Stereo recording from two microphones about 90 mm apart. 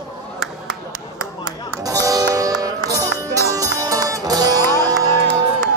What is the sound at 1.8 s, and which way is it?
Music, 40° right (ahead or behind).